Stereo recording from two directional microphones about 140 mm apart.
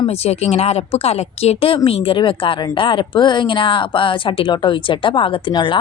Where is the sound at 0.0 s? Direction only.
45° left (ahead or behind).